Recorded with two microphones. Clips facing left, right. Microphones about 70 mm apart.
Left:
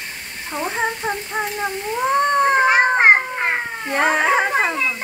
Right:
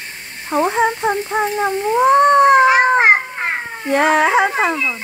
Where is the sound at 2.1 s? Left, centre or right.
Right.